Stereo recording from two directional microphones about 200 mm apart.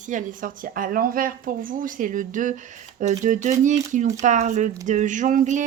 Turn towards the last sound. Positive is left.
turn(degrees=-40)  # may be behind; listen again after turning